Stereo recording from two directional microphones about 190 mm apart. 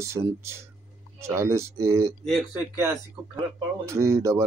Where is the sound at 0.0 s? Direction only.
15° right (ahead or behind).